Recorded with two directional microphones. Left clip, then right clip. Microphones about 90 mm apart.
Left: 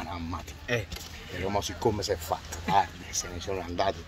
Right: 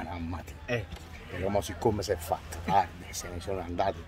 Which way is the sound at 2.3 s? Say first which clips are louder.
Left 1 dB; 40° right (ahead or behind).